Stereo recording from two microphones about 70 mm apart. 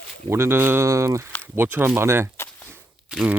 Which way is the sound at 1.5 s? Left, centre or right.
Right.